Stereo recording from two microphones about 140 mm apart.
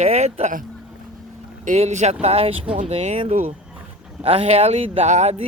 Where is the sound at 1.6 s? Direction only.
55° right (ahead or behind).